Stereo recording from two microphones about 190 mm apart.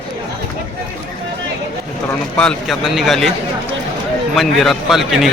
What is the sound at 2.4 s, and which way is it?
Speech, centre (ahead or behind).